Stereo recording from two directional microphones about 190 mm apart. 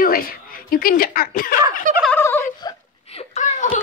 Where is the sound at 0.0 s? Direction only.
50° left (ahead or behind).